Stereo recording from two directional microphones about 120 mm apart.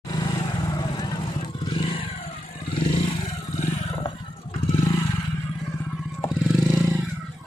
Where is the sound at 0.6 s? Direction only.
35° left (ahead or behind).